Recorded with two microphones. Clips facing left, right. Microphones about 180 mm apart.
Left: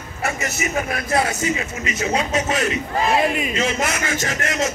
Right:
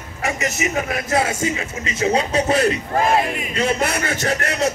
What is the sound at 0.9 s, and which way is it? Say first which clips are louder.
A man's voice: right 1 dB; 25° right (ahead or behind).